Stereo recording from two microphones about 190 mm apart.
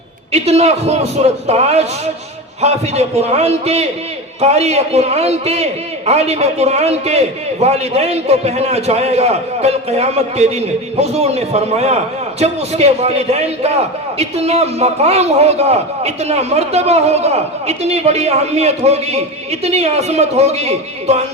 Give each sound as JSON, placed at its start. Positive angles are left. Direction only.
{"t": 0.3, "sound": "a man's voice", "side_deg": -35}